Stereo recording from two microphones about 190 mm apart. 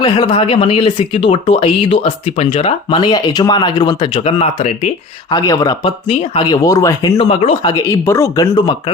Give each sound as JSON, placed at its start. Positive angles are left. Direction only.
{"t": 0.0, "sound": "speech", "side_deg": 25}
{"t": 5.3, "sound": "speech", "side_deg": 20}